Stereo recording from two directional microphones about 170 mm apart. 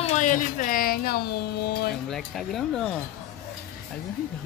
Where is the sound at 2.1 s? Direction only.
Centre (ahead or behind).